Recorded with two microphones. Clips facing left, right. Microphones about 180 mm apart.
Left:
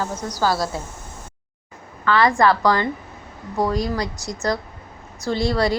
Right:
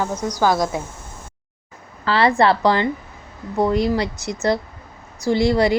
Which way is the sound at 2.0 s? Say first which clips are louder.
Right 1 dB; 30° right (ahead or behind).